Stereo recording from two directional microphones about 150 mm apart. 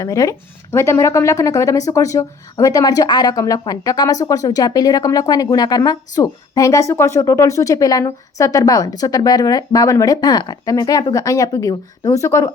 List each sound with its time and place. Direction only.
0.0 s speech: 20° left (ahead or behind)